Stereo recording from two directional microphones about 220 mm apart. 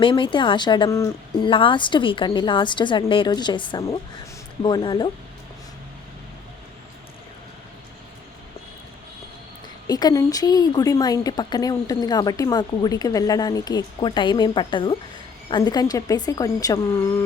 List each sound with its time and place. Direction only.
0.0 s speech: 20° left (ahead or behind)
9.8 s a woman's voice: 15° left (ahead or behind)